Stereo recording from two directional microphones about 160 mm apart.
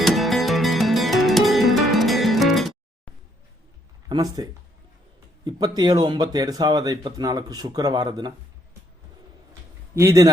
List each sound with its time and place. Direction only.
0.0 s music: centre (ahead or behind)
4.1 s speech: 25° right (ahead or behind)
5.5 s speech: 25° right (ahead or behind)
9.9 s speech: 20° right (ahead or behind)